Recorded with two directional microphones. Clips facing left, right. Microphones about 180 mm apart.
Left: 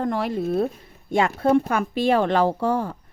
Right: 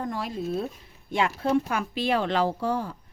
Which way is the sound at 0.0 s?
65° left (ahead or behind).